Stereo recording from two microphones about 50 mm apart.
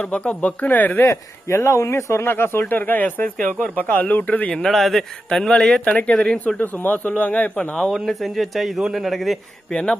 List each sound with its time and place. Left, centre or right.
0.0 s speech: left
1.0 s speech: left
2.2 s speech: left
2.6 s speech: left
4.5 s speech: centre
6.6 s speech: left
7.9 s speech: centre